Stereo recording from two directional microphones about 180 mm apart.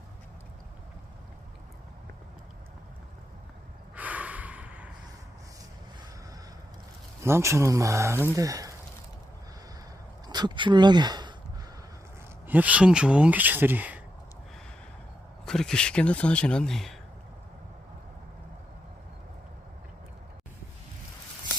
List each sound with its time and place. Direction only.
3.9 s gasp: 10° right (ahead or behind)
7.3 s speech: 15° right (ahead or behind)
10.2 s speech: 25° right (ahead or behind)
12.5 s speech: 10° right (ahead or behind)
15.4 s speech: 5° left (ahead or behind)